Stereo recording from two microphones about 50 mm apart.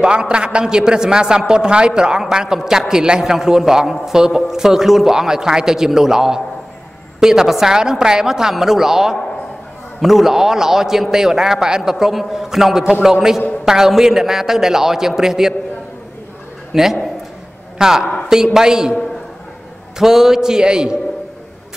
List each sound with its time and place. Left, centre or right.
0.0 s a man's voice: centre
16.7 s a man's voice: centre
20.0 s a man's voice: centre